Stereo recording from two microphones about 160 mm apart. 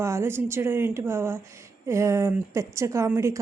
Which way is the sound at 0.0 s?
15° right (ahead or behind).